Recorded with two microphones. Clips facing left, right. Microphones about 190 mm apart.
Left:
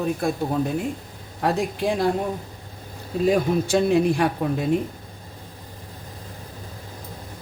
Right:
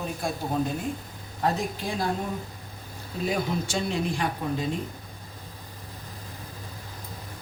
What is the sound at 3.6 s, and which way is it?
Speech, 60° left (ahead or behind).